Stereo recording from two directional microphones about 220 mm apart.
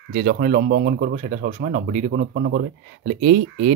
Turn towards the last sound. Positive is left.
turn(degrees=-45)  # may be behind; listen again after turning